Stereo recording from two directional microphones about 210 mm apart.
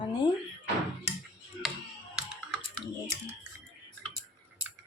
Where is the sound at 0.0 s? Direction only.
20° left (ahead or behind).